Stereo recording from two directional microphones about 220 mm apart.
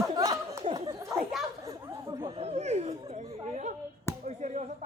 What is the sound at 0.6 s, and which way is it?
Chatter, 20° right (ahead or behind).